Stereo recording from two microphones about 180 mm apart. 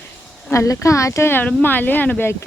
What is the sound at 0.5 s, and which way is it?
Speech, 15° left (ahead or behind).